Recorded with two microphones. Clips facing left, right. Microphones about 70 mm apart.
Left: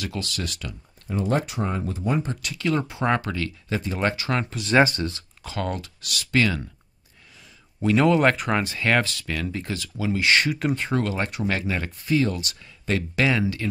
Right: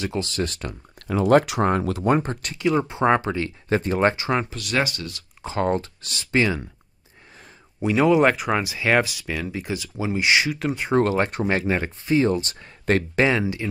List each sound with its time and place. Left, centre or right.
0.0 s speech: right
0.9 s speech: right
2.0 s speech: right
2.6 s speech: centre
3.7 s speech: right
4.1 s speech: right
4.6 s speech: left
5.4 s speech: right
7.8 s speech: centre
10.4 s speech: centre
11.0 s speech: right
11.4 s speech: right
13.2 s speech: right